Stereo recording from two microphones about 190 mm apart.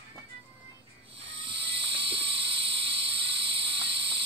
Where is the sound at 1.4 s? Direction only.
25° right (ahead or behind).